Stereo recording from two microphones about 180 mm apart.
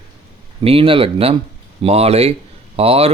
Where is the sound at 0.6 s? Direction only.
30° right (ahead or behind).